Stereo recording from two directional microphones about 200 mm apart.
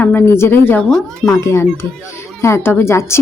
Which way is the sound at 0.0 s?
10° left (ahead or behind).